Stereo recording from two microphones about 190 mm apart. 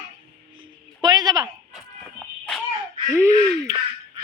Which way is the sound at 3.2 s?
15° right (ahead or behind).